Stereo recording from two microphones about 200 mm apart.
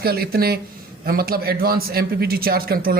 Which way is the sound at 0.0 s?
50° right (ahead or behind).